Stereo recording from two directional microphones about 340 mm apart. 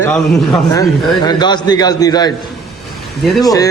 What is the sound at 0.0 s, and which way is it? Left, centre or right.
A man's voice, centre.